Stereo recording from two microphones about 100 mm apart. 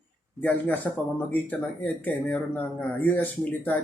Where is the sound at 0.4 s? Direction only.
20° left (ahead or behind).